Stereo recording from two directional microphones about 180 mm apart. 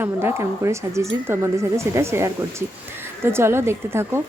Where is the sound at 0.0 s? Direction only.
15° right (ahead or behind).